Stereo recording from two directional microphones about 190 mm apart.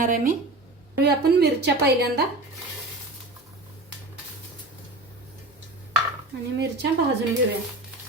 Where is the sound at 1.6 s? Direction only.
60° right (ahead or behind).